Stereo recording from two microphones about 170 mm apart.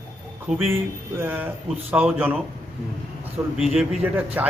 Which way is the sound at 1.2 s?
10° right (ahead or behind).